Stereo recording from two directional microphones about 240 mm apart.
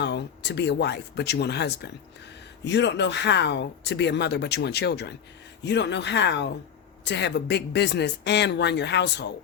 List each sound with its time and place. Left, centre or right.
0.0 s speech: left